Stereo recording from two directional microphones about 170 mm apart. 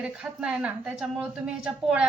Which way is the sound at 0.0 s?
5° right (ahead or behind).